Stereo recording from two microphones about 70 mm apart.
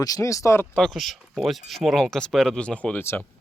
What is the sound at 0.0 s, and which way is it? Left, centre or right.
Speech, left.